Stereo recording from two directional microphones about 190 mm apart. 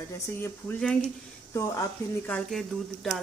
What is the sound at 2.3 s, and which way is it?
Speech, centre (ahead or behind).